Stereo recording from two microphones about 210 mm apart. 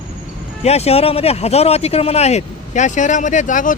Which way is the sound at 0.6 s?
30° left (ahead or behind).